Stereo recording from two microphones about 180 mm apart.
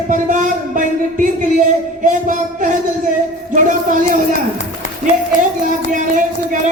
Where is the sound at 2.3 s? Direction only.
45° right (ahead or behind).